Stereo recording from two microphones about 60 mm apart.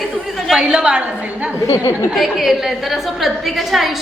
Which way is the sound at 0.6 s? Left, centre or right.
Centre.